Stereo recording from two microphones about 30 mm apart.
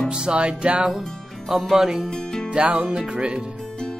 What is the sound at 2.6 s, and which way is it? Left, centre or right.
Music, right.